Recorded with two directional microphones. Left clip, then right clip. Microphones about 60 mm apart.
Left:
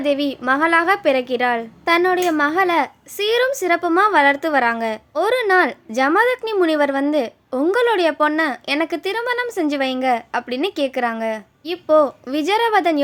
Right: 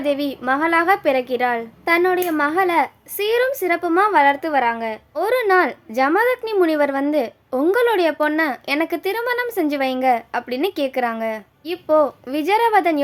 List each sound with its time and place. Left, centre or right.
0.0 s speech: left
5.1 s speech: left